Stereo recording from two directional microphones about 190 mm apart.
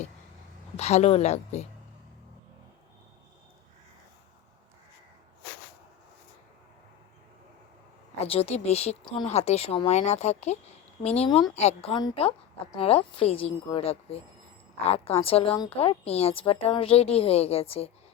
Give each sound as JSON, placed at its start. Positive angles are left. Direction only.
{"t": 0.8, "sound": "a woman's voice", "side_deg": 35}
{"t": 8.3, "sound": "a woman's voice", "side_deg": 30}